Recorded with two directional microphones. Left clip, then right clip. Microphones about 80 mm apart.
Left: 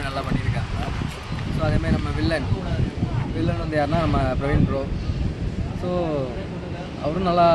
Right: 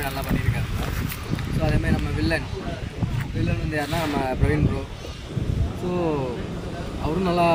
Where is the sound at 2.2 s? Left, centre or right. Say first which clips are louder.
Left 1 dB; left.